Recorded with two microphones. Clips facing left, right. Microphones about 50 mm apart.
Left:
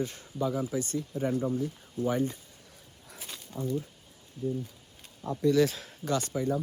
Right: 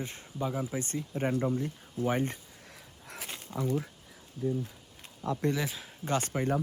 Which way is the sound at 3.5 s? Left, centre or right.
Right.